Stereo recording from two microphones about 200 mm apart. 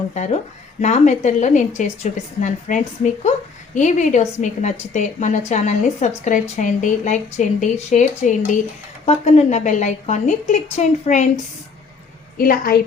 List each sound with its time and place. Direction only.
0.1 s a woman's voice: 35° left (ahead or behind)
12.4 s a woman's voice: 45° left (ahead or behind)